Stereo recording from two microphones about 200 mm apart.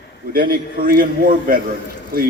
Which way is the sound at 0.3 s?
45° right (ahead or behind).